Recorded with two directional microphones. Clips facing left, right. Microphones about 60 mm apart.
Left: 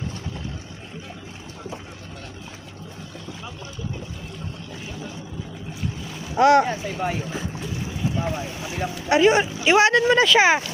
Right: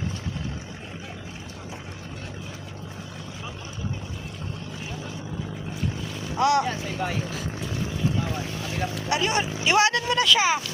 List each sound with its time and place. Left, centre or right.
6.3 s speech: left
8.5 s vehicle: centre
9.0 s speech: left